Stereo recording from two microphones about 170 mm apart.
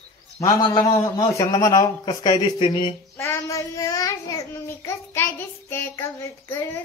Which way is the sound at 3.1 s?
15° left (ahead or behind).